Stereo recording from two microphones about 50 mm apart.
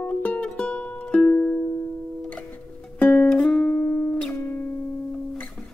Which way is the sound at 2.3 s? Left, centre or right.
Left.